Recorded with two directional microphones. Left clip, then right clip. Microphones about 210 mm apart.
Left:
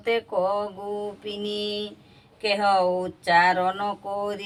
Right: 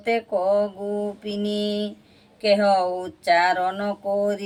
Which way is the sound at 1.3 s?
5° right (ahead or behind).